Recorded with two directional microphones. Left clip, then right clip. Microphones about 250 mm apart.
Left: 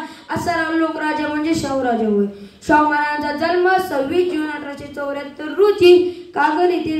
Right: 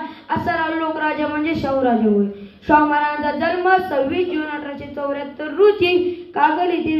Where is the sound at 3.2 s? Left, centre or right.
Left.